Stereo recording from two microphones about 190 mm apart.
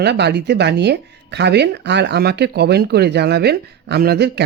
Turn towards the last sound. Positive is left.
turn(degrees=-60)  # may be behind; listen again after turning